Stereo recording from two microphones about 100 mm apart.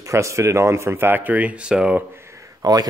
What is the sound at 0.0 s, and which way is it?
Speech, 30° right (ahead or behind).